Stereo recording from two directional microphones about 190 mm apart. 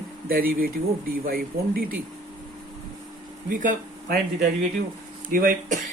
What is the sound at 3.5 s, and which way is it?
Speech, 45° right (ahead or behind).